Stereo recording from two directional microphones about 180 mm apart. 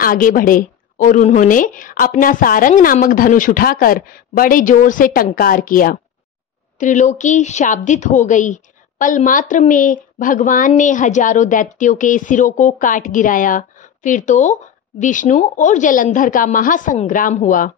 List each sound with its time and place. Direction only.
0.0 s a woman's voice: 50° left (ahead or behind)